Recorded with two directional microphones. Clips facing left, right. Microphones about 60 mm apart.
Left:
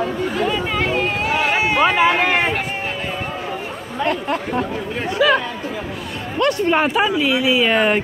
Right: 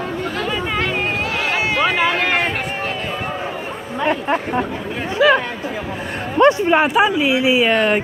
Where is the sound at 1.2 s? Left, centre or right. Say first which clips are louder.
Left 2 dB; centre.